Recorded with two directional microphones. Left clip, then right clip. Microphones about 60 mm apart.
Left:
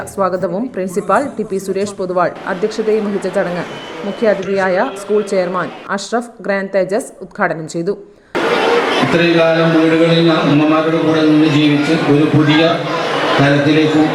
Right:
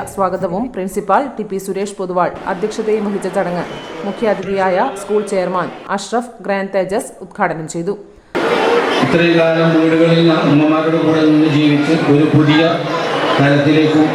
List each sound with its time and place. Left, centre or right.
0.2 s a woman's voice: left
2.8 s a man's voice: centre
3.4 s a woman's voice: left
4.5 s speech: left
5.1 s a man's voice: centre
6.5 s a woman's voice: left
8.3 s a man's voice: centre